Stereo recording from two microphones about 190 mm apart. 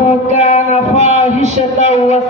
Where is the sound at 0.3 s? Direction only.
35° left (ahead or behind).